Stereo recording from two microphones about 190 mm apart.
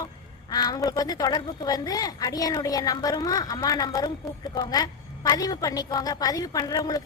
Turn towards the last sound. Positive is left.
turn(degrees=20)  # may be behind; listen again after turning